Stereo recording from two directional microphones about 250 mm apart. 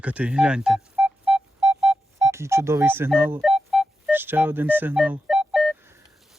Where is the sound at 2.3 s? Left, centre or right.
Centre.